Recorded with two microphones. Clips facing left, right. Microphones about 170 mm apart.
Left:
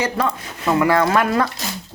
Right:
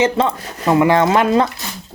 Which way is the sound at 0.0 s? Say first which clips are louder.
Right 5 dB; 25° right (ahead or behind).